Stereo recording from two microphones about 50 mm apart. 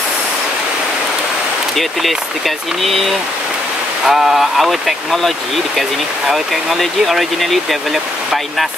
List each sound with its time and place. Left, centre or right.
1.8 s speech: centre
4.0 s speech: centre